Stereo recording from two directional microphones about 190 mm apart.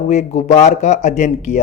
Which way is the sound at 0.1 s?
35° left (ahead or behind).